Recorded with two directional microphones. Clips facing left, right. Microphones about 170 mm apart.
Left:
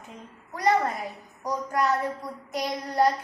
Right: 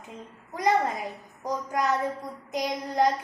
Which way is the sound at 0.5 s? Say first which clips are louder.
Left 1 dB; 15° right (ahead or behind).